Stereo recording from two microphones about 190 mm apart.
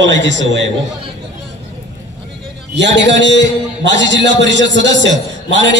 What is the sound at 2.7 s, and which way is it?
A man's voice, 70° right (ahead or behind).